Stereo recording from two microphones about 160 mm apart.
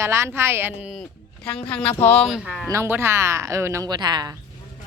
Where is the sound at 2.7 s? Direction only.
15° right (ahead or behind).